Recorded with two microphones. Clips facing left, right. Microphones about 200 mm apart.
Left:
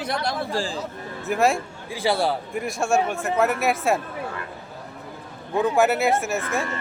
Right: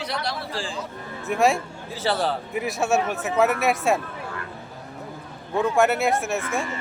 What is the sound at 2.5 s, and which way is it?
Speech, 5° right (ahead or behind).